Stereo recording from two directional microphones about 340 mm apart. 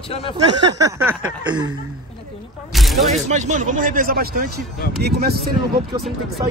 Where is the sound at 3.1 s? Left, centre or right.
Right.